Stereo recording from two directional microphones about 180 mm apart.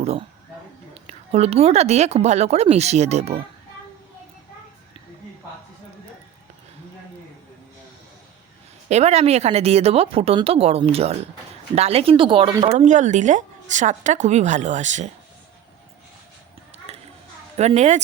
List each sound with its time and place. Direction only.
0.0 s speech: 35° right (ahead or behind)
8.9 s speech: 35° right (ahead or behind)
16.9 s a sound: 35° right (ahead or behind)
17.6 s speech: 40° right (ahead or behind)